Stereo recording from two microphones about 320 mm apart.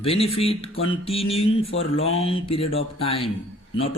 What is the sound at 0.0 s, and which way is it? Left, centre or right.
Speech, centre.